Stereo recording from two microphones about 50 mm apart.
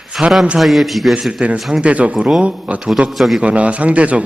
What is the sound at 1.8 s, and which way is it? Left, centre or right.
Speech, right.